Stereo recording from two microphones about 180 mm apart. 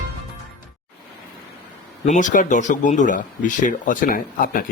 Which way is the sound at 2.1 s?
45° left (ahead or behind).